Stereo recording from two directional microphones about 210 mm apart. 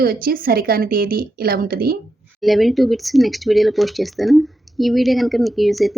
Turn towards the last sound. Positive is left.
turn(degrees=0)  # may be behind; listen again after turning